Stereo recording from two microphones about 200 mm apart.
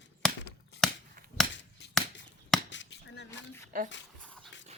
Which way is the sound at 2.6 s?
65° left (ahead or behind).